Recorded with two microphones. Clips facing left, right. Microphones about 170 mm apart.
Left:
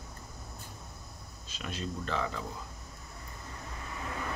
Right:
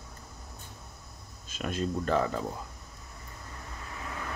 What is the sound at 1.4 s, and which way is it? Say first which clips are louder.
Speech: right 7 dB; 50° right (ahead or behind).